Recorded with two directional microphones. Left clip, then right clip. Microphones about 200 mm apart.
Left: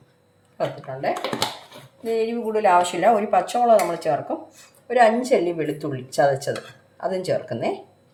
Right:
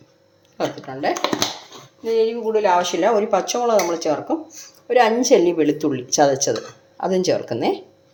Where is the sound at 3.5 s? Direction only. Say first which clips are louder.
Left 1 dB; 30° right (ahead or behind).